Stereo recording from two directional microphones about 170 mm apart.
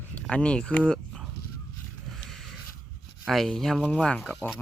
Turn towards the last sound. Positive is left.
turn(degrees=-5)  # may be behind; listen again after turning